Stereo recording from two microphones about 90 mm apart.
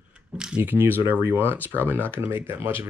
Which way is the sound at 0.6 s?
20° right (ahead or behind).